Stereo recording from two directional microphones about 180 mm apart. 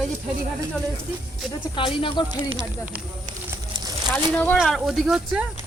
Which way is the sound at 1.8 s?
30° left (ahead or behind).